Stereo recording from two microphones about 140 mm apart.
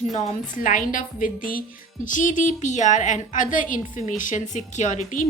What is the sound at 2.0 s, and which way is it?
Speech, 70° left (ahead or behind).